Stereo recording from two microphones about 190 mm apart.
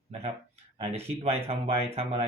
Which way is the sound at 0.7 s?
30° right (ahead or behind).